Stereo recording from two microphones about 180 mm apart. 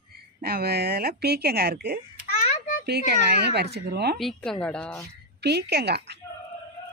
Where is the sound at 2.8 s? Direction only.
65° right (ahead or behind).